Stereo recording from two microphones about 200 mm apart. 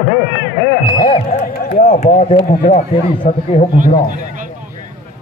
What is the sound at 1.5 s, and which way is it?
Speech, 40° left (ahead or behind).